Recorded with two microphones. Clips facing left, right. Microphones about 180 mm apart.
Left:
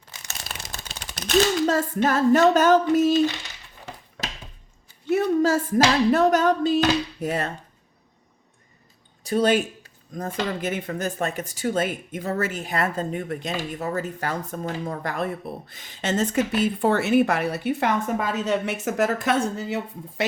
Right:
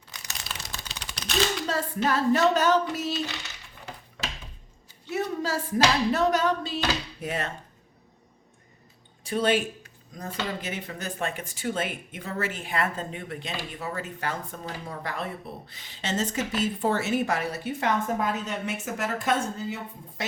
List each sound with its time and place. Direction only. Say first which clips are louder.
0.4 s a sound: left 1 dB; 50° left (ahead or behind)
5.0 s speech: left 9 dB; 50° left (ahead or behind)
9.2 s speech: left 4 dB; 40° left (ahead or behind); by 20.2 s 80° left